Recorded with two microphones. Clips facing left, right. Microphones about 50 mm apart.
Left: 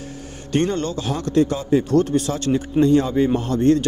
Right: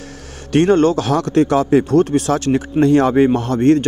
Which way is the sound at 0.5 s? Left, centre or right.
Right.